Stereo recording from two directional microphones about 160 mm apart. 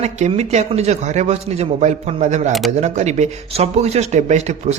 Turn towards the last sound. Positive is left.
turn(degrees=-45)  # may be behind; listen again after turning